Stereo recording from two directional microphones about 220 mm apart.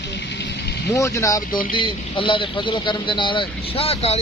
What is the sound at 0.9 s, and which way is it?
Speech, 15° left (ahead or behind).